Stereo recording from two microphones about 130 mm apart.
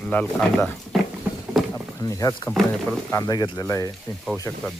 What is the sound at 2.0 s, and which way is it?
Speech, 25° left (ahead or behind).